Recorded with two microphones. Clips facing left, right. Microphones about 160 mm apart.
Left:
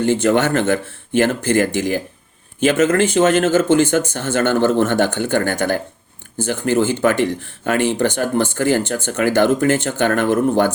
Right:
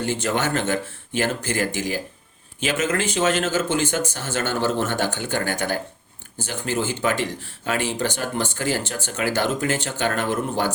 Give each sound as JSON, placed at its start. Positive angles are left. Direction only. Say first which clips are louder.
{"t": 0.0, "sound": "speech", "louder": "left 8 dB", "side_deg": 55}